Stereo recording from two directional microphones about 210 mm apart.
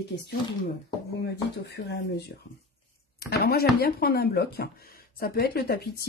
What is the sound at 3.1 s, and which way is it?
Chopping, 45° left (ahead or behind).